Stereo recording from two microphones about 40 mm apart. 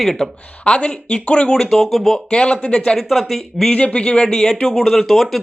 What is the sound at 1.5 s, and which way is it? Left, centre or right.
Speech, centre.